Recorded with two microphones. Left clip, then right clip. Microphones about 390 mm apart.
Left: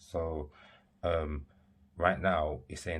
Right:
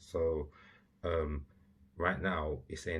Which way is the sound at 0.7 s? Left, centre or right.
Left.